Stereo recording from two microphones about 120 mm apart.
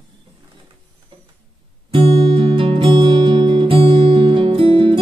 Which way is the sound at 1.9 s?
45° right (ahead or behind).